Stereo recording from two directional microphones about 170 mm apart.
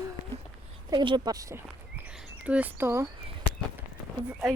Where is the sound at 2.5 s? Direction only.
10° right (ahead or behind).